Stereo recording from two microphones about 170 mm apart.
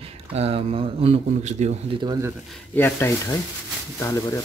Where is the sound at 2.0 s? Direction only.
25° right (ahead or behind).